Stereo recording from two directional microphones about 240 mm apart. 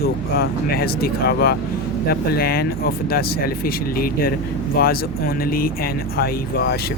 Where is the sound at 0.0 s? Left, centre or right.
Left.